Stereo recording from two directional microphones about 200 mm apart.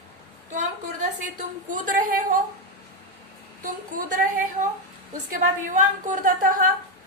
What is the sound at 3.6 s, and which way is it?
A woman's voice, 40° right (ahead or behind).